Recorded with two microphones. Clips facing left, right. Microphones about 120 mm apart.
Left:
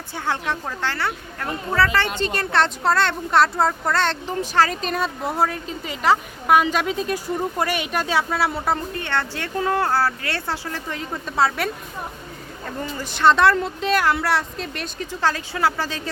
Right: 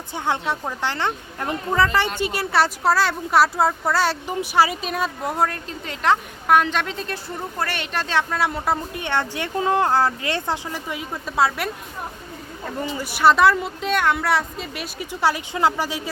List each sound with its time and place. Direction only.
0.1 s a woman's voice: 15° right (ahead or behind); by 8.8 s centre (ahead or behind)
8.9 s speech: 15° right (ahead or behind)